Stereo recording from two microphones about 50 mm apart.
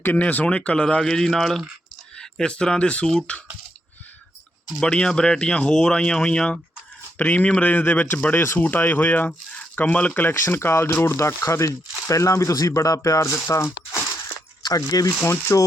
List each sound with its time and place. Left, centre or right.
0.0 s speech: left; by 1.6 s centre
2.1 s speech: centre
4.8 s speech: centre
10.2 s speech: left
11.3 s speech: left
13.5 s speech: left
15.2 s speech: left